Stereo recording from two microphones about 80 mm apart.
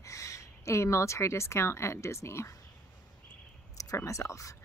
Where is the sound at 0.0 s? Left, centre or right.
Left.